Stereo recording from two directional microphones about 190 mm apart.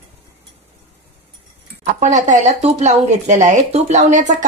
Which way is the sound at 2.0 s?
40° right (ahead or behind).